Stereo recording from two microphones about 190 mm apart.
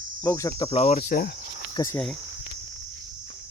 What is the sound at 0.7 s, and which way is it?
Speech, 35° left (ahead or behind).